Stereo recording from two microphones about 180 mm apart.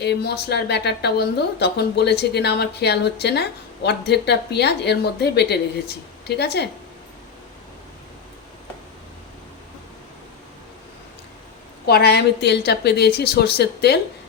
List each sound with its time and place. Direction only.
0.0 s speech: 65° left (ahead or behind)
11.9 s speech: 60° left (ahead or behind)